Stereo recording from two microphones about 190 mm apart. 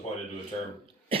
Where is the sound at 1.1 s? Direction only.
30° right (ahead or behind).